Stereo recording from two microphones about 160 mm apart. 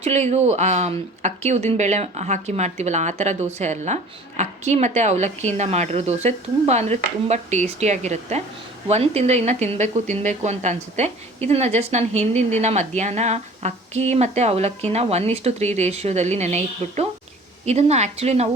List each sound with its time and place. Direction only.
0.0 s a woman's voice: 45° right (ahead or behind)